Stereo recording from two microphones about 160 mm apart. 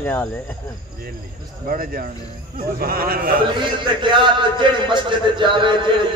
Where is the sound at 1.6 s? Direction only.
60° right (ahead or behind).